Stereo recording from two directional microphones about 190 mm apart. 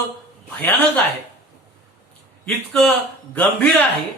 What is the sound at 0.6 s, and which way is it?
Speech, 10° left (ahead or behind).